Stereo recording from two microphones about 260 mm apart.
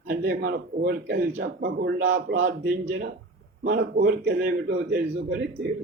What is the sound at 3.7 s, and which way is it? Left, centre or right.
A man's voice, right.